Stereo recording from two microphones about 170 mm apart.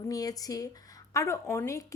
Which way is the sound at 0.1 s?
20° left (ahead or behind).